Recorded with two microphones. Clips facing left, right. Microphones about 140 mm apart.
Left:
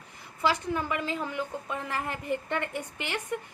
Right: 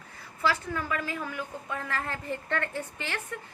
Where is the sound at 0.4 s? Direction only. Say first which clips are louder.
Left 2 dB; 20° left (ahead or behind).